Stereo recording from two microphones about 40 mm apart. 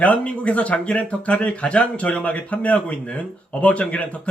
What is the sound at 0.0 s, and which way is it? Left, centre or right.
Speech, left.